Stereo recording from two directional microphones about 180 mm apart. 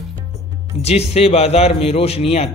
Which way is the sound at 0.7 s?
35° left (ahead or behind).